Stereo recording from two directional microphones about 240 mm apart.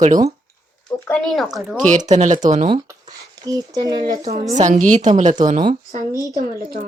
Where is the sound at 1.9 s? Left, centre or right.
Right.